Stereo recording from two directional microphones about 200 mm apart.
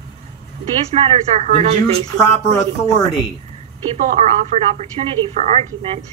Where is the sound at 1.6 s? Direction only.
30° right (ahead or behind).